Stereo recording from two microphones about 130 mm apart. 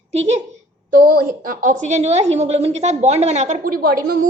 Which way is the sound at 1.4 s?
90° right.